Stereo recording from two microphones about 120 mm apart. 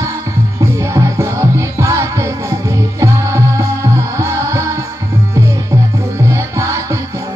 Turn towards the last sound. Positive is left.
turn(degrees=-25)  # may be behind; listen again after turning